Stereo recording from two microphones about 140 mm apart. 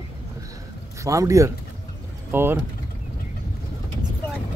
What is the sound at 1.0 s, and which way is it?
Speech, 25° right (ahead or behind).